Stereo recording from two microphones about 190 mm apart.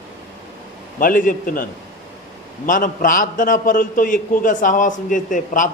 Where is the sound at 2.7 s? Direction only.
45° left (ahead or behind).